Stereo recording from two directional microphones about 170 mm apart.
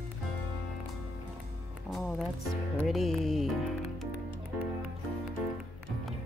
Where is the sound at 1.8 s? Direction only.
Centre (ahead or behind).